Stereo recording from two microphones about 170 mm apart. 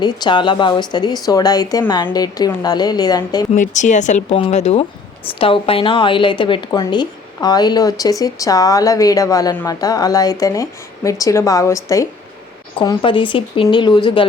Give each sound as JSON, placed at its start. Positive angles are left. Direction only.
{"t": 0.0, "sound": "a woman's voice", "side_deg": 25}
{"t": 3.5, "sound": "a woman's voice", "side_deg": 45}